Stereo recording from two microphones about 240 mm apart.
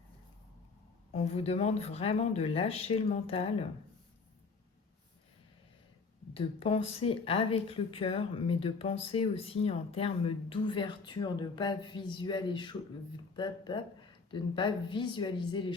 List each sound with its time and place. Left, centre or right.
1.1 s speech: left
6.3 s speech: left